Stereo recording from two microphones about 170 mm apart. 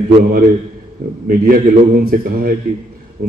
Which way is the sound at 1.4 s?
60° right (ahead or behind).